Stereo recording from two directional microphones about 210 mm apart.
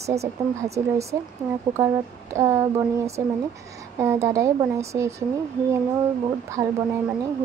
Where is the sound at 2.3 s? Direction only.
15° right (ahead or behind).